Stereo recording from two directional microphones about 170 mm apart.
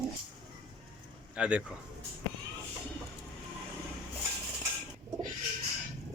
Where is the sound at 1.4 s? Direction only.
5° right (ahead or behind).